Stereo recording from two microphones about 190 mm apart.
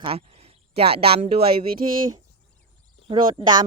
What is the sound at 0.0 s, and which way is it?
Speech, 30° right (ahead or behind).